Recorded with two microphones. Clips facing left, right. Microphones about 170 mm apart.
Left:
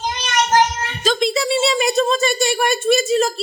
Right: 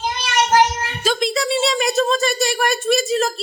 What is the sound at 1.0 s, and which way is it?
A woman's voice, 5° right (ahead or behind).